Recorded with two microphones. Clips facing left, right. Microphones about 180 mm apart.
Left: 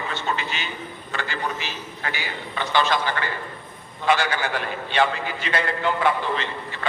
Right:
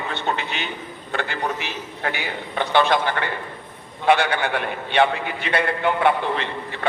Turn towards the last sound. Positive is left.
turn(degrees=-60)  # may be behind; listen again after turning